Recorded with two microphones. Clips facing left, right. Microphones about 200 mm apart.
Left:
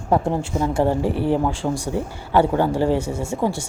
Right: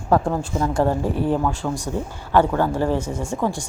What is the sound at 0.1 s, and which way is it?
Speech, 20° left (ahead or behind).